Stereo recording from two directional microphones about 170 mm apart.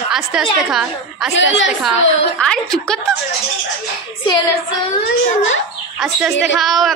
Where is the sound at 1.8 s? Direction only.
Centre (ahead or behind).